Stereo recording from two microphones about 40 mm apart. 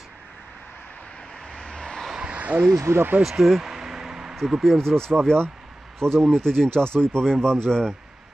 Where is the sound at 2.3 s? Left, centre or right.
Right.